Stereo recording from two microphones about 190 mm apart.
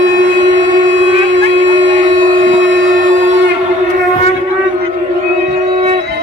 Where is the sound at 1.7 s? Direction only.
25° right (ahead or behind).